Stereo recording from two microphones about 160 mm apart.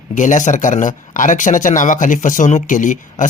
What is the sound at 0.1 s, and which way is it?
Speech, 50° left (ahead or behind).